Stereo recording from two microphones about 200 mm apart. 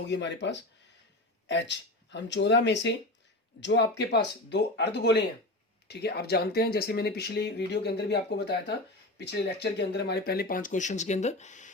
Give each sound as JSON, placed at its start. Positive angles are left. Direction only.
{"t": 0.0, "sound": "speech", "side_deg": 60}